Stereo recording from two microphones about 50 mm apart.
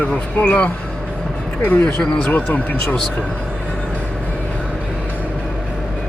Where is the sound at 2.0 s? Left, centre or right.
Centre.